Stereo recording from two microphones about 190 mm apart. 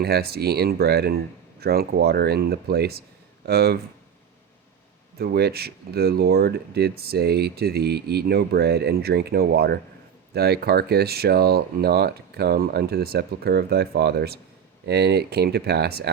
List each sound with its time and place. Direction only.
0.0 s speech: 55° right (ahead or behind)
5.1 s speech: 55° right (ahead or behind)